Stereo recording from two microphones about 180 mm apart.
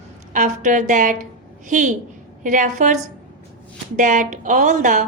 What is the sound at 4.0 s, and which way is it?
Speech, 45° right (ahead or behind).